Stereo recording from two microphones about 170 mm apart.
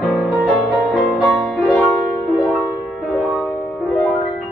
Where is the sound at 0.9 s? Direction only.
Centre (ahead or behind).